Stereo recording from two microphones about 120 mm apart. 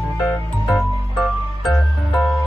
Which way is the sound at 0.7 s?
Centre (ahead or behind).